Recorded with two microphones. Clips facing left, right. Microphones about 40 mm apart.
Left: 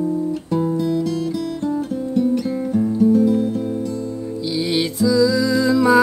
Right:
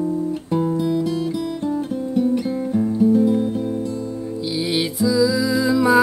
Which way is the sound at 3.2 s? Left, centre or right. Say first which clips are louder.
Left 1 dB; centre.